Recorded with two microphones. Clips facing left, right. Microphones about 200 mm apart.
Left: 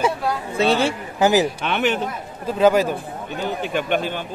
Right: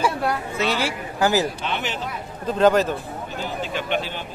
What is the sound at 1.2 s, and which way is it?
Speech, 15° left (ahead or behind).